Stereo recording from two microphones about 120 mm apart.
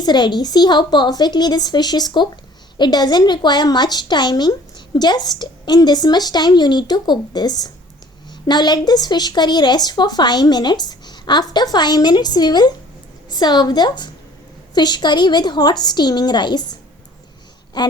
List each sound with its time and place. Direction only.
0.0 s a woman's voice: 40° left (ahead or behind)
17.7 s a woman's voice: 35° left (ahead or behind)